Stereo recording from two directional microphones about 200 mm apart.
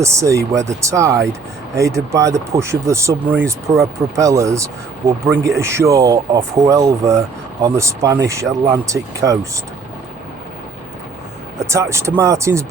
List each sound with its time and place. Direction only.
0.0 s speech: 15° right (ahead or behind)
11.6 s speech: 15° right (ahead or behind)